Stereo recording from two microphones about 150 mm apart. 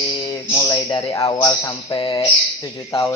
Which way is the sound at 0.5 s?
20° left (ahead or behind).